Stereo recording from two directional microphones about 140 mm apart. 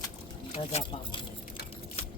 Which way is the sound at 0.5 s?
50° left (ahead or behind).